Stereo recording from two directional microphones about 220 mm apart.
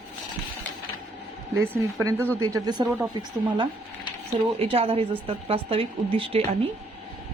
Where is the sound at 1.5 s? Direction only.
10° right (ahead or behind).